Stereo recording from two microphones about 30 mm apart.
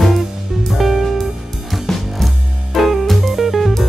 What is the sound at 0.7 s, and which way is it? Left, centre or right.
Music, centre.